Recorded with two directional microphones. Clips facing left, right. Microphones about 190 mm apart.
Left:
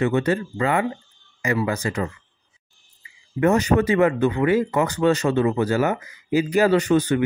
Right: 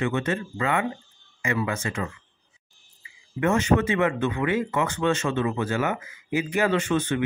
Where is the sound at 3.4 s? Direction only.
35° left (ahead or behind).